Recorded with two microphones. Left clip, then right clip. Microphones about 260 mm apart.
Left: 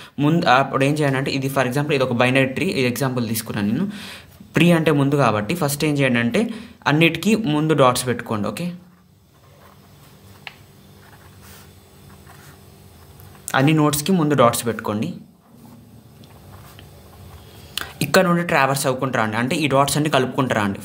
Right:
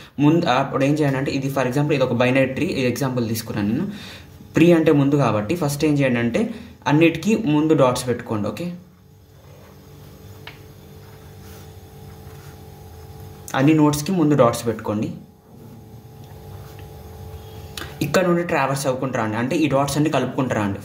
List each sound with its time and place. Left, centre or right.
0.0 s speech: left
13.5 s speech: left
17.7 s speech: left